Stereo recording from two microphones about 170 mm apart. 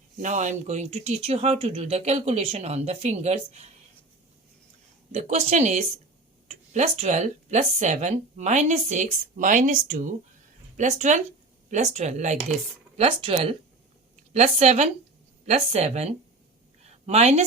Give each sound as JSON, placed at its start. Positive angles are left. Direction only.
{"t": 0.2, "sound": "speech", "side_deg": -45}
{"t": 5.1, "sound": "speech", "side_deg": -40}
{"t": 13.0, "sound": "speech", "side_deg": -35}
{"t": 16.8, "sound": "a sound", "side_deg": -40}